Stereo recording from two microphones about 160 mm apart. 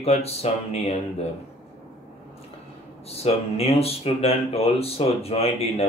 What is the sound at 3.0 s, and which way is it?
Speech, 40° left (ahead or behind).